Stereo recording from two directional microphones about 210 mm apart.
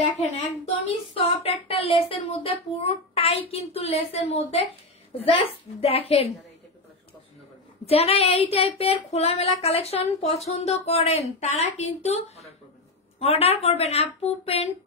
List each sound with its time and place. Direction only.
0.7 s speech: 30° left (ahead or behind)
1.7 s child singing: 25° left (ahead or behind)
7.8 s child singing: 30° left (ahead or behind)
13.2 s child singing: 30° left (ahead or behind)